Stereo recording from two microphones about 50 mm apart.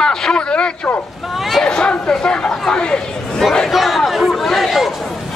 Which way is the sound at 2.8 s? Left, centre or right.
Centre.